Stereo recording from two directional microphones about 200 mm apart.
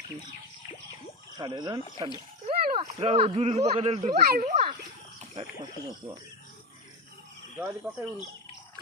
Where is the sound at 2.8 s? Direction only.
30° right (ahead or behind).